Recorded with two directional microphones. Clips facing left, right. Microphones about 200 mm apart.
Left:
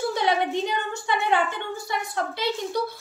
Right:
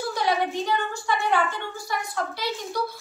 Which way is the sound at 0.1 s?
20° left (ahead or behind).